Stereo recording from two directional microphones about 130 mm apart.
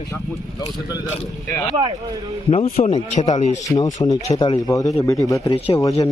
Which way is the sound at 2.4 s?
45° left (ahead or behind).